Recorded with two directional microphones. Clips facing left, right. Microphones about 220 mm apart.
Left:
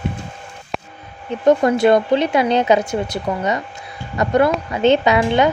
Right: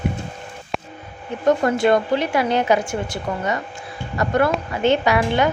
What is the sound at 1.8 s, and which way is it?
A woman's voice, 20° left (ahead or behind).